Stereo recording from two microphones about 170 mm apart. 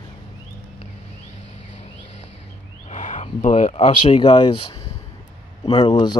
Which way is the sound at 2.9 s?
45° left (ahead or behind).